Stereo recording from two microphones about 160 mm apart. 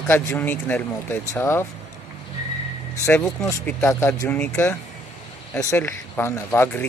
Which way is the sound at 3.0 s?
15° left (ahead or behind).